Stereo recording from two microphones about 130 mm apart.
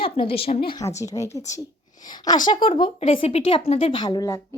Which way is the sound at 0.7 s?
25° left (ahead or behind).